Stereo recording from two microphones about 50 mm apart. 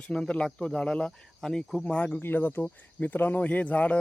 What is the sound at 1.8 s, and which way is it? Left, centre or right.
Speech, left.